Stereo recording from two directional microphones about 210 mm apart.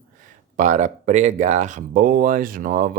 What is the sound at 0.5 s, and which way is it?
Speech, 35° right (ahead or behind).